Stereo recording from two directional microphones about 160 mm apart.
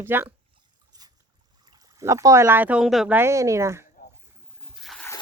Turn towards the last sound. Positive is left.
turn(degrees=0)  # may be behind; listen again after turning